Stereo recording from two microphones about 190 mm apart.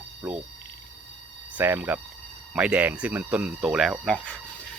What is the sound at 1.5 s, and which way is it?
Speech, 10° right (ahead or behind).